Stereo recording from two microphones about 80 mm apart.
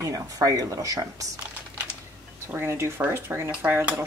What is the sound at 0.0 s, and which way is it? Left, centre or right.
Speech, right.